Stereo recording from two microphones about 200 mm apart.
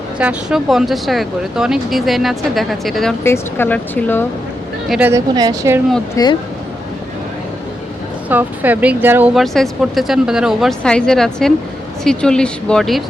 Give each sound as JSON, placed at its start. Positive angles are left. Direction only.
{"t": 0.2, "sound": "speech", "side_deg": -5}
{"t": 3.2, "sound": "speech", "side_deg": 10}
{"t": 4.9, "sound": "speech", "side_deg": -10}
{"t": 5.3, "sound": "speech", "side_deg": -20}
{"t": 6.2, "sound": "speech", "side_deg": 15}
{"t": 8.3, "sound": "speech", "side_deg": -10}